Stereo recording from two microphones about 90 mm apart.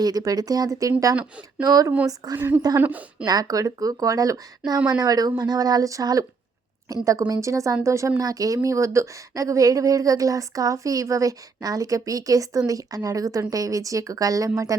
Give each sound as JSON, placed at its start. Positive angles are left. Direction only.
{"t": 0.0, "sound": "speech", "side_deg": -45}
{"t": 1.1, "sound": "speech", "side_deg": -15}
{"t": 1.6, "sound": "speech", "side_deg": -45}
{"t": 2.7, "sound": "a woman's voice", "side_deg": -20}
{"t": 3.2, "sound": "speech", "side_deg": -45}